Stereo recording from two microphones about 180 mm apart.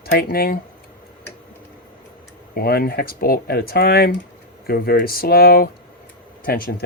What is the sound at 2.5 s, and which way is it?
Speech, 60° left (ahead or behind).